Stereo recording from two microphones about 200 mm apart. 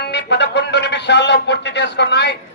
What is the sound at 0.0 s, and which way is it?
A man's voice, 60° left (ahead or behind).